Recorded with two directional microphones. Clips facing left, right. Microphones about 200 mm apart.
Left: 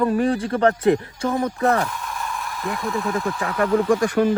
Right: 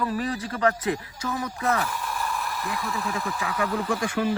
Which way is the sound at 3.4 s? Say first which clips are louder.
Left 8 dB; 55° left (ahead or behind).